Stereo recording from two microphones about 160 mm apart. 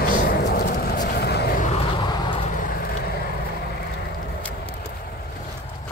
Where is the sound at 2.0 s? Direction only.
30° left (ahead or behind).